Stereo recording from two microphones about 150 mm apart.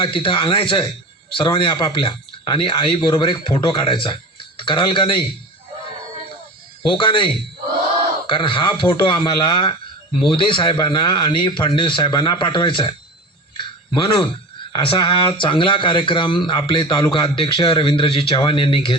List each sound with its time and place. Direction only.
0.0 s a man's voice: 35° left (ahead or behind)
6.8 s a man's voice: 35° left (ahead or behind)
13.6 s a sound: 35° left (ahead or behind)
14.7 s a man's voice: 35° left (ahead or behind)